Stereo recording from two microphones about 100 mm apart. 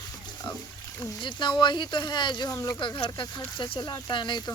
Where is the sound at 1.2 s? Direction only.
50° left (ahead or behind).